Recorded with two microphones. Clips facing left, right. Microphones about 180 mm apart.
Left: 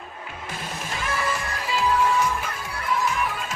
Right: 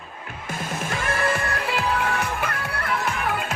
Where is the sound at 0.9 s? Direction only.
55° right (ahead or behind).